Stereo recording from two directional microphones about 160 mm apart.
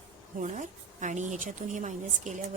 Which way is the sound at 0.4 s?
50° right (ahead or behind).